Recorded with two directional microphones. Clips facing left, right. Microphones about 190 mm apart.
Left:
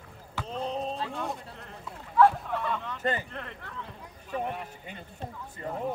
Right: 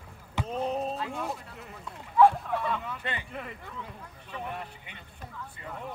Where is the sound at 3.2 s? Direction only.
5° right (ahead or behind).